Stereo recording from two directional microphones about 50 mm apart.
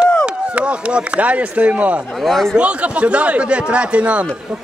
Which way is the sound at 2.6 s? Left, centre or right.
Right.